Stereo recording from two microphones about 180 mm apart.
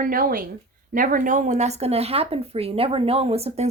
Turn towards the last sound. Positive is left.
turn(degrees=-35)  # may be behind; listen again after turning